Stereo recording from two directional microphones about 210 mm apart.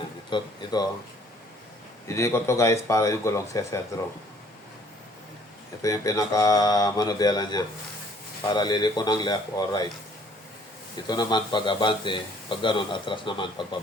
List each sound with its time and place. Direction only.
0.3 s speech: 20° left (ahead or behind)
2.0 s speech: 15° left (ahead or behind)
5.8 s speech: 15° left (ahead or behind)
11.0 s speech: 20° left (ahead or behind)